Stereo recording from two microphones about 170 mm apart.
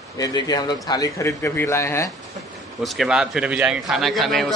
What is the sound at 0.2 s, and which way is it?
A man's voice, 25° left (ahead or behind).